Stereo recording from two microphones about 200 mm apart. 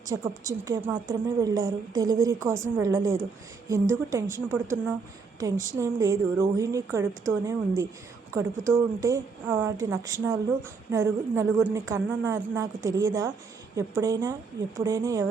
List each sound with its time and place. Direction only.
0.1 s speech: 15° right (ahead or behind)